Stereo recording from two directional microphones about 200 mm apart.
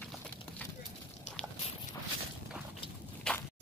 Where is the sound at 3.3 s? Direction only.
5° left (ahead or behind).